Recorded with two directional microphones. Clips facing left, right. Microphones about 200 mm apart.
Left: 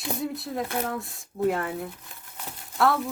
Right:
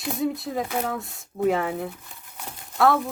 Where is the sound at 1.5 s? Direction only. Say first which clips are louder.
Right 4 dB; 60° right (ahead or behind).